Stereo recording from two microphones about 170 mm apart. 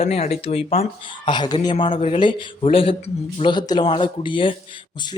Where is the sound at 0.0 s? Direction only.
40° left (ahead or behind).